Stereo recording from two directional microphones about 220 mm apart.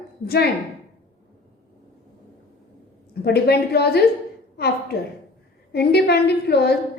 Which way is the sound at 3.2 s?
45° left (ahead or behind).